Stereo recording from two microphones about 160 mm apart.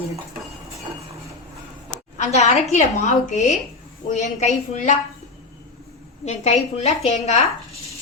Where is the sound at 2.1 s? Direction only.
45° left (ahead or behind).